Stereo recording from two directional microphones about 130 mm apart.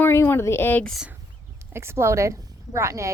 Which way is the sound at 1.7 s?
20° right (ahead or behind).